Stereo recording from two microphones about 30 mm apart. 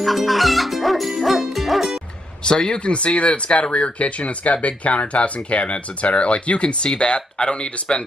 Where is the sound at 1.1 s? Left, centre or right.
Centre.